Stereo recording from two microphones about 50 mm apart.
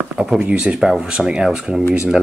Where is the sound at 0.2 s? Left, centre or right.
Centre.